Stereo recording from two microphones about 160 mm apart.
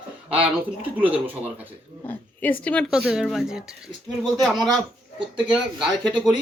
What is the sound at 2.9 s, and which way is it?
Speech, 5° right (ahead or behind).